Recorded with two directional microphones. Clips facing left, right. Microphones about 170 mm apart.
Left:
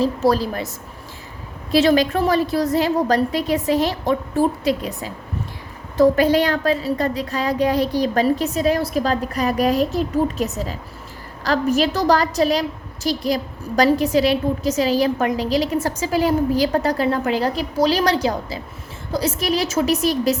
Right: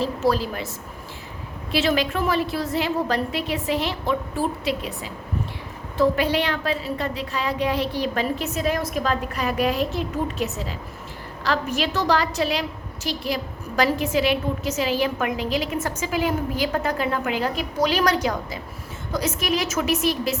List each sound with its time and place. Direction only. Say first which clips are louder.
0.0 s a woman's voice: left 4 dB; 40° left (ahead or behind)
1.7 s a woman's voice: left 6 dB; 40° left (ahead or behind)